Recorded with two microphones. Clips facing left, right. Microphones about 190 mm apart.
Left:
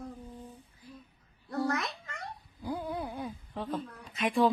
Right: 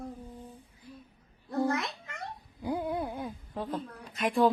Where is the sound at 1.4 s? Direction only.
20° right (ahead or behind).